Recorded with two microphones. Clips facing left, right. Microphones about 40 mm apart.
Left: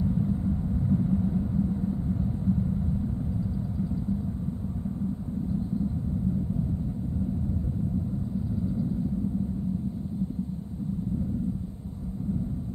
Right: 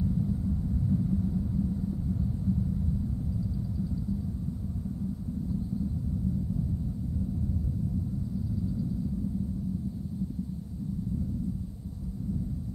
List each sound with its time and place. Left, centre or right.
0.0 s rumble: left
8.6 s vehicle: left